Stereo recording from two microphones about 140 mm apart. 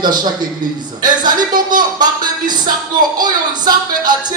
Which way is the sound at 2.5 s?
30° right (ahead or behind).